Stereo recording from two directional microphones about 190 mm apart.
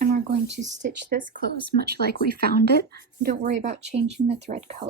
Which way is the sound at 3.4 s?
40° right (ahead or behind).